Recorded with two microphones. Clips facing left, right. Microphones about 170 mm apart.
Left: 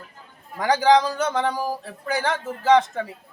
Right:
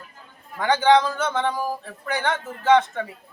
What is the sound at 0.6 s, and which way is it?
Speech, 35° left (ahead or behind).